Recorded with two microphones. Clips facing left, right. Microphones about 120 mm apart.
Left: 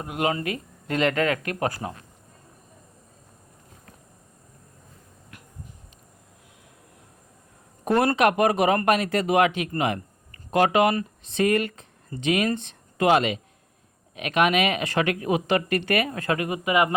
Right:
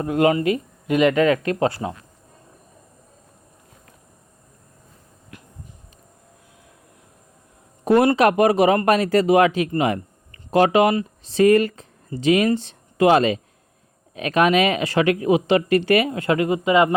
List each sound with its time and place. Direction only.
0.1 s speech: 20° left (ahead or behind)
0.4 s speech: 20° right (ahead or behind)
7.9 s speech: 20° right (ahead or behind)
8.1 s speech: 35° right (ahead or behind)